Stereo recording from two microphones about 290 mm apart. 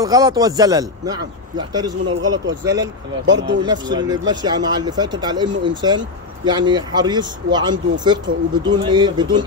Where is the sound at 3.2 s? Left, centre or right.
Right.